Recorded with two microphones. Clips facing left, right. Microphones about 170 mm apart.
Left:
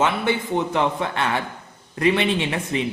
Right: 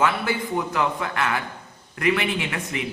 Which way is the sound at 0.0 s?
25° left (ahead or behind).